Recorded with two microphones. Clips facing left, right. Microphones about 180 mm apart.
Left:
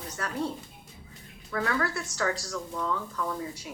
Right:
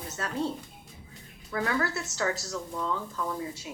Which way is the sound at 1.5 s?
25° right (ahead or behind).